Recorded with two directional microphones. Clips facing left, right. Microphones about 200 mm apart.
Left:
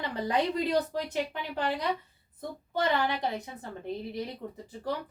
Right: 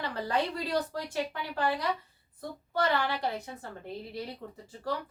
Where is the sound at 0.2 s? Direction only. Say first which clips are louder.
Left 4 dB; 20° left (ahead or behind).